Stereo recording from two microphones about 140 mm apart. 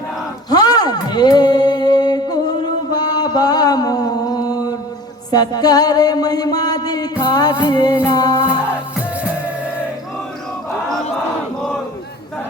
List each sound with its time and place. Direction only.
0.5 s music: 30° left (ahead or behind)
3.0 s mantra: 30° left (ahead or behind)
5.3 s music: 30° left (ahead or behind)